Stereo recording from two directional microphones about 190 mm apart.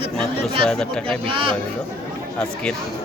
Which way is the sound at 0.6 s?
5° left (ahead or behind).